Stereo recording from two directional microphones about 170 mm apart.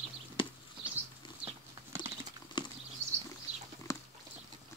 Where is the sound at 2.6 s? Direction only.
25° left (ahead or behind).